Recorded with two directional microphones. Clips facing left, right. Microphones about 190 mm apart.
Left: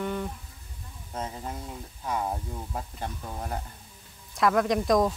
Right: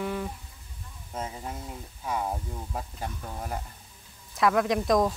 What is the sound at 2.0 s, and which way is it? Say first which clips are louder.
Speech: even; centre (ahead or behind).